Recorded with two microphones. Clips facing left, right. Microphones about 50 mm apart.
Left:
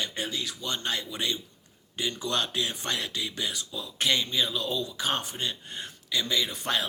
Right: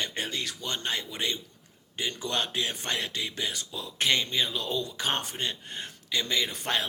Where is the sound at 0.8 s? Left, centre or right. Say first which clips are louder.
Even; right.